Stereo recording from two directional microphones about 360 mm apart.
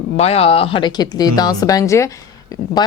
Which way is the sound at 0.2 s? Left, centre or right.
Centre.